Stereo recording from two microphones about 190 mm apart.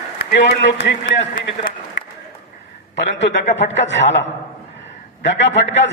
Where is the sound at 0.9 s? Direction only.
60° left (ahead or behind).